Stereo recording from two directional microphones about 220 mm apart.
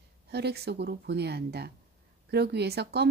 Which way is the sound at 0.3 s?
50° right (ahead or behind).